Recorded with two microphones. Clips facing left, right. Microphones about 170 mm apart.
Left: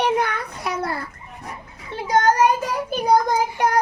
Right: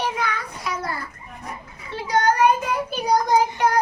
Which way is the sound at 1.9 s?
45° left (ahead or behind).